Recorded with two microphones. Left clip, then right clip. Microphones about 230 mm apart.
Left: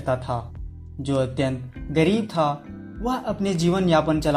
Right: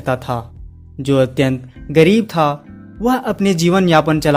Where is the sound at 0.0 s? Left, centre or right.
Right.